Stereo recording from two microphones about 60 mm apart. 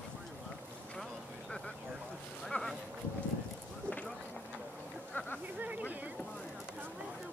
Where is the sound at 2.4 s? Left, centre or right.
Centre.